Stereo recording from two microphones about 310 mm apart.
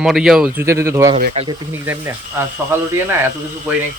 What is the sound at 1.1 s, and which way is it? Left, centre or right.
Speech, right.